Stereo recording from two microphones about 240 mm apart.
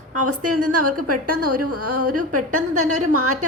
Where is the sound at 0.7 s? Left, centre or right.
Right.